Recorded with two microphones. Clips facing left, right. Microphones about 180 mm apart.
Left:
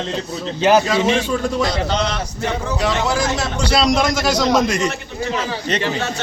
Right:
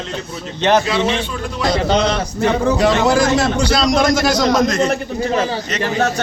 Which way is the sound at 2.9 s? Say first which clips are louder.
Right 6 dB; 70° right (ahead or behind).